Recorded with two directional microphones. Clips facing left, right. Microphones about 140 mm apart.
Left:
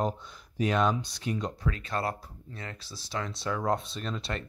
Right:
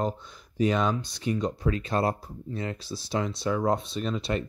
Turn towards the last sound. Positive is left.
turn(degrees=-5)  # may be behind; listen again after turning